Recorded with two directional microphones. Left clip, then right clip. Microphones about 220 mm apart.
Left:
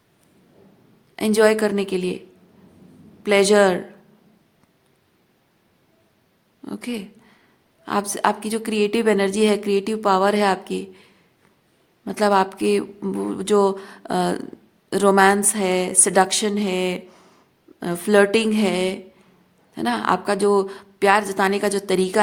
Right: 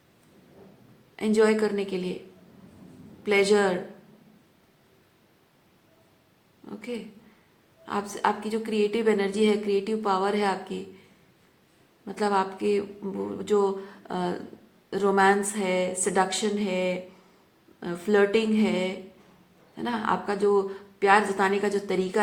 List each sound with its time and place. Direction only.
1.1 s speech: 55° left (ahead or behind)
3.2 s a woman's voice: 55° left (ahead or behind)
6.7 s a woman's voice: 55° left (ahead or behind)
12.0 s speech: 55° left (ahead or behind)